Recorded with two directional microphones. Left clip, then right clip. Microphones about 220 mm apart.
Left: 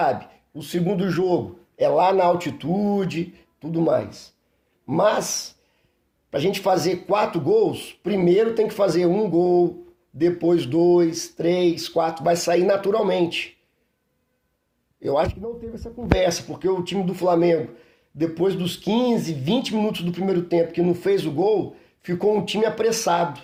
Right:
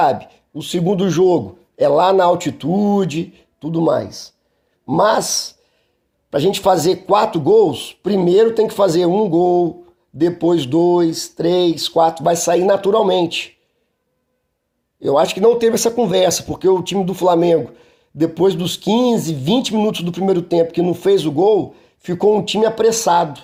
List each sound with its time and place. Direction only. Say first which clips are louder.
0.0 s a man's voice: right 6 dB; 35° right (ahead or behind)
15.0 s speech: right 10 dB; 30° right (ahead or behind)